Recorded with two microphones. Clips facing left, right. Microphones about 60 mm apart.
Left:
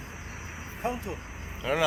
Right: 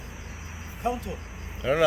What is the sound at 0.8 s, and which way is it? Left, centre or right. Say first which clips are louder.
Speech: right 3 dB; left.